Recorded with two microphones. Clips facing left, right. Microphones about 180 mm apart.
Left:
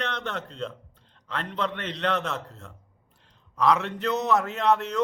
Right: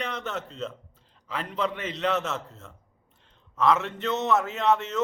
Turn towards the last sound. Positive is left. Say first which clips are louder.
# left 1 dB
turn(degrees=0)  # may be behind; listen again after turning